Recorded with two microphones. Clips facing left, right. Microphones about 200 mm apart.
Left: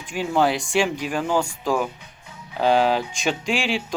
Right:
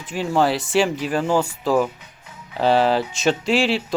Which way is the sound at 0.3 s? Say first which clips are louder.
Right 2 dB; centre (ahead or behind).